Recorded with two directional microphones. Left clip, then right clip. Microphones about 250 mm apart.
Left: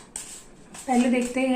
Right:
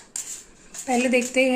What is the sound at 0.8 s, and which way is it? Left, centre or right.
Speech, right.